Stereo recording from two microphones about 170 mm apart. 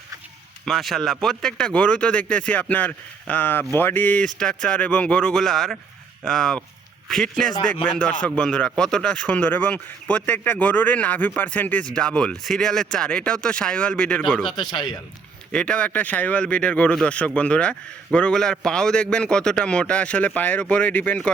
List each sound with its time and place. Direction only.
0.6 s speech: centre (ahead or behind)
14.4 s speech: 25° left (ahead or behind)
15.5 s speech: 5° left (ahead or behind)